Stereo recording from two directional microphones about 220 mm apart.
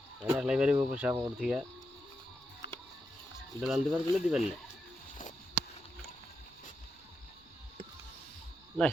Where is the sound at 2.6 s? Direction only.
50° left (ahead or behind).